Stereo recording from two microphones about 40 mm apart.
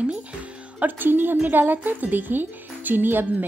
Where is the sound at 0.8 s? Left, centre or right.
Right.